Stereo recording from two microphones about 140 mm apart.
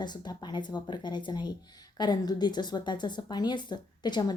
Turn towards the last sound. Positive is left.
turn(degrees=30)  # may be behind; listen again after turning